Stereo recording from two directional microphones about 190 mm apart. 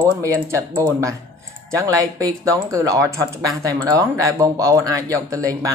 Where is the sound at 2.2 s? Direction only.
20° right (ahead or behind).